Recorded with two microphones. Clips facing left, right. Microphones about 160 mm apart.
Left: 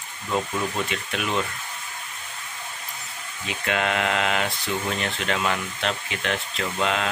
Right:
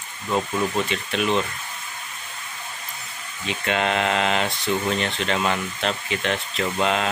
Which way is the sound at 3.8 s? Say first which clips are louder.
Right 2 dB; 30° right (ahead or behind).